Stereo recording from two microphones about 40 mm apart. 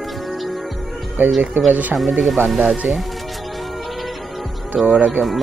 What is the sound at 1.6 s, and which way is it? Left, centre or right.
Speech, right.